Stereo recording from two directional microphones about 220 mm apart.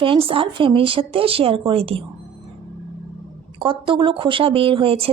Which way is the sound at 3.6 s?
20° right (ahead or behind).